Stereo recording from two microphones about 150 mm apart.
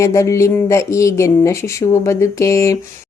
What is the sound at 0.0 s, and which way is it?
A woman's voice, 20° left (ahead or behind).